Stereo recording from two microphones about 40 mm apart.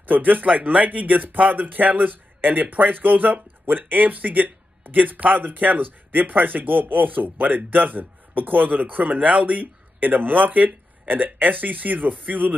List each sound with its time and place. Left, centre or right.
0.0 s speech: right